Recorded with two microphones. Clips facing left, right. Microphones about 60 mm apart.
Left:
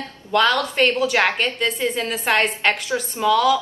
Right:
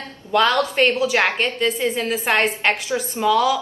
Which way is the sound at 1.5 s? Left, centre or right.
Centre.